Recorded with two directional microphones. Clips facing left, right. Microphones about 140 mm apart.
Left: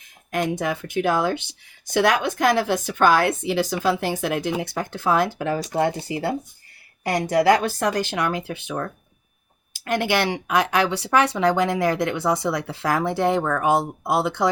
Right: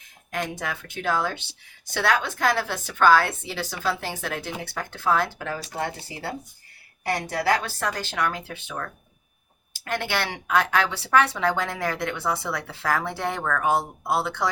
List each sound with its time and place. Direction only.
0.3 s speech: 15° left (ahead or behind)